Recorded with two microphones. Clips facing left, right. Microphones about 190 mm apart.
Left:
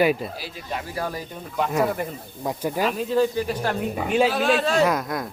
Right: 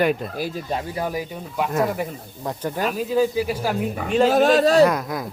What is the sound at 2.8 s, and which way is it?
Speech, 5° right (ahead or behind).